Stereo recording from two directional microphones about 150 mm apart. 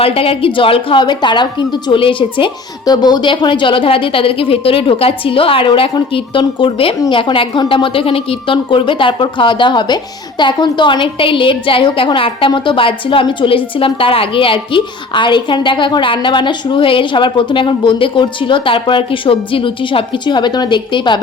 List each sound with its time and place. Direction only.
0.0 s a woman's voice: 40° left (ahead or behind)